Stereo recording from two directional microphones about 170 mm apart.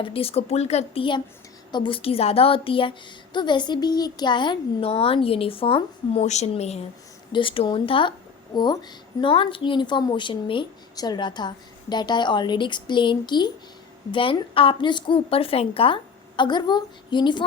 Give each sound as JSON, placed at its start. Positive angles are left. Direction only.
{"t": 0.0, "sound": "a woman's voice", "side_deg": 35}